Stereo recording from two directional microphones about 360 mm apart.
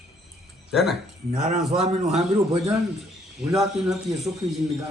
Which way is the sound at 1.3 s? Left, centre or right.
Right.